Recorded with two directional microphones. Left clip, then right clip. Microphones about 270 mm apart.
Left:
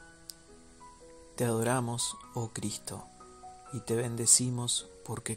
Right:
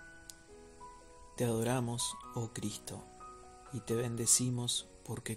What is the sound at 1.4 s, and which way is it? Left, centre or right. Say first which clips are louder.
Speech: left 4 dB; centre.